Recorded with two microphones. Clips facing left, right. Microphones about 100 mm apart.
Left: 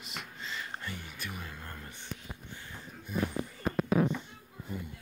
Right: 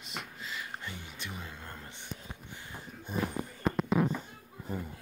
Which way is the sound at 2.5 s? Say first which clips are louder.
Right 1 dB; 20° right (ahead or behind).